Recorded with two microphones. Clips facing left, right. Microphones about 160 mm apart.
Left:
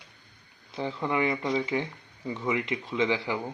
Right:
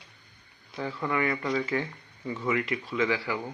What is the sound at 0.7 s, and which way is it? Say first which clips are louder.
Speech: left 1 dB; 20° left (ahead or behind).